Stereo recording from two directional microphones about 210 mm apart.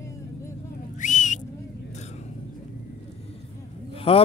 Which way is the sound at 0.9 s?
35° left (ahead or behind).